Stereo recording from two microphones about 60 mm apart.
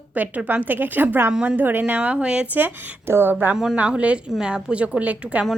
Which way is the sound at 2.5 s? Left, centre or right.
Right.